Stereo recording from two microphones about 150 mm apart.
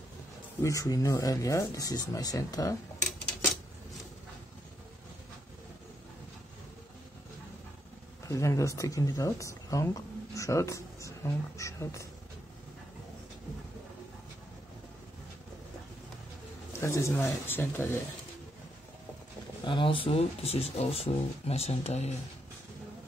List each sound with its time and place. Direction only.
0.6 s speech: 20° left (ahead or behind)
8.3 s speech: 20° left (ahead or behind)
16.8 s speech: 20° left (ahead or behind)
19.6 s speech: 35° left (ahead or behind)